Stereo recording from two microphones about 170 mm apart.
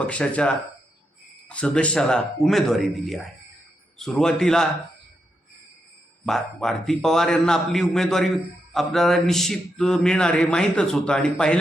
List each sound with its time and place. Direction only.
0.0 s speech: 5° left (ahead or behind)
6.2 s speech: centre (ahead or behind)